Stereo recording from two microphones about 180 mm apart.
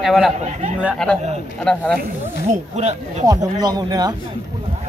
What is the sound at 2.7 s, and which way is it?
Speech, 40° right (ahead or behind).